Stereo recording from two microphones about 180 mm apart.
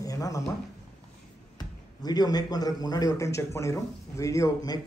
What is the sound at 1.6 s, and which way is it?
Speech, 20° left (ahead or behind).